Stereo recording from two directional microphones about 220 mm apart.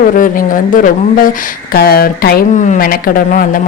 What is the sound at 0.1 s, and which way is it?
Speech, 40° left (ahead or behind).